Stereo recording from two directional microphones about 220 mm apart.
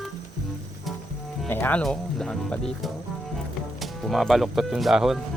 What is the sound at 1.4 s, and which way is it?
Speech, 10° left (ahead or behind).